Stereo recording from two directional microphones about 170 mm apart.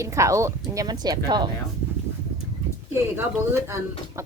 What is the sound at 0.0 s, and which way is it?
A woman's voice, 15° right (ahead or behind).